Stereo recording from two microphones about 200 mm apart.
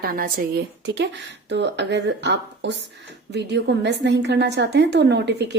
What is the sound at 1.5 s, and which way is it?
A woman's voice, 60° right (ahead or behind).